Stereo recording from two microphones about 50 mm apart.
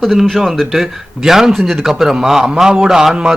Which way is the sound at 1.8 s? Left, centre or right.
Centre.